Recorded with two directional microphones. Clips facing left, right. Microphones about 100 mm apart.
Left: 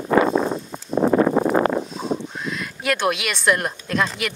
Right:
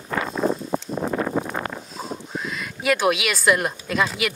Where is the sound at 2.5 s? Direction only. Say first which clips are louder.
Right 1 dB; centre (ahead or behind).